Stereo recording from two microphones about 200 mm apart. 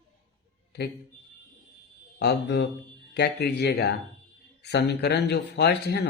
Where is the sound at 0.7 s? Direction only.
55° left (ahead or behind).